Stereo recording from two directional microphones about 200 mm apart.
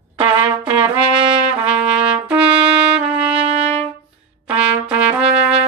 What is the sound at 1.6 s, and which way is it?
Trumpet, 5° right (ahead or behind).